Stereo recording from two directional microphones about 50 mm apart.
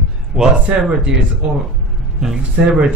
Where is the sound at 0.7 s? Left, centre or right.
Right.